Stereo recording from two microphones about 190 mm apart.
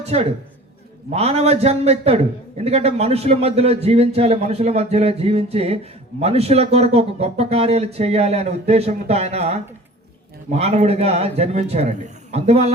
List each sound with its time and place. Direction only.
0.0 s a man's voice: 35° right (ahead or behind)